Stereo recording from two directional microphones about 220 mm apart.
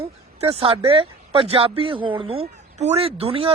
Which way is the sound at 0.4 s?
25° right (ahead or behind).